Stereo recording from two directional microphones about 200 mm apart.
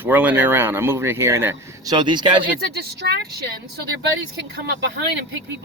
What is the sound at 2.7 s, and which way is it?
Speech, 55° right (ahead or behind).